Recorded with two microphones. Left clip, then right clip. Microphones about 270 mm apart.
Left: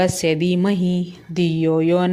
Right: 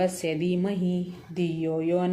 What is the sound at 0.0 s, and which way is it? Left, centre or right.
Speech, left.